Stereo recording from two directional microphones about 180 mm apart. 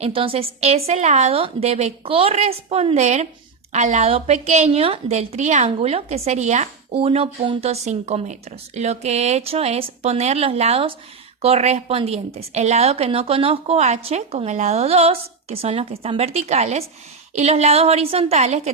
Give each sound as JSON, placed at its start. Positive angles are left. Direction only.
{"t": 0.0, "sound": "a woman's voice", "side_deg": -30}